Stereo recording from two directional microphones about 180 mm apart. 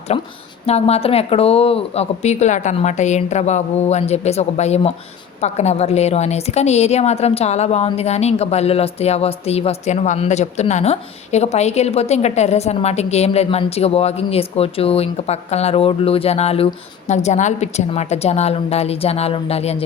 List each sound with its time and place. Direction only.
0.1 s a woman's voice: 30° left (ahead or behind)